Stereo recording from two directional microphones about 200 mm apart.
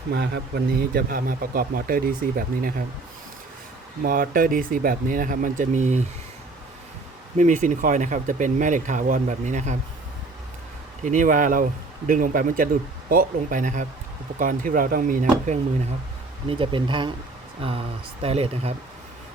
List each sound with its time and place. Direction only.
0.1 s speech: 55° right (ahead or behind)
4.0 s speech: 45° right (ahead or behind)
7.3 s speech: 40° right (ahead or behind)
11.0 s speech: 40° right (ahead or behind)
16.5 s speech: 25° right (ahead or behind)